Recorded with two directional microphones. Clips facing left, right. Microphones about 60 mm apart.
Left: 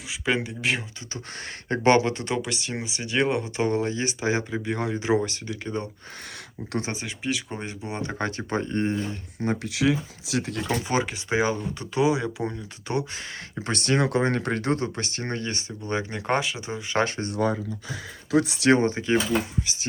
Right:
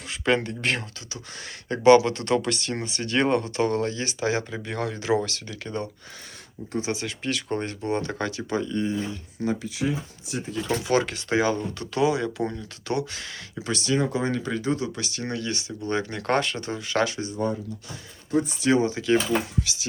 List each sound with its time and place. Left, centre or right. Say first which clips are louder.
0.1 s speech: right 3 dB; centre
1.7 s speech: right 4 dB; left
2.0 s speech: right 3 dB; centre
7.0 s speech: even; centre
8.2 s speech: even; left
9.6 s speech: left 4 dB; left
10.7 s speech: right 4 dB; centre
13.6 s speech: left 1 dB; left
14.9 s speech: even; left
15.9 s speech: right 1 dB; centre
17.0 s speech: left 1 dB; left
17.3 s speech: left 2 dB; left
18.7 s speech: left 2 dB; left
19.6 s speech: left 1 dB; left